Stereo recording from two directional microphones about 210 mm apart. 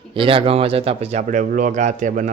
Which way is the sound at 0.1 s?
25° right (ahead or behind).